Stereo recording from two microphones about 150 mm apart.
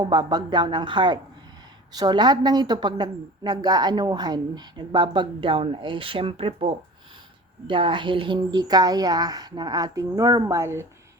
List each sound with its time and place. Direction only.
0.0 s a woman's voice: 30° right (ahead or behind)